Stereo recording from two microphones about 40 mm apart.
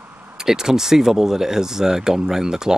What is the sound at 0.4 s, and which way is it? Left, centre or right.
Speech, centre.